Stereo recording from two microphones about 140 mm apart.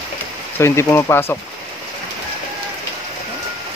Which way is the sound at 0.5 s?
20° left (ahead or behind).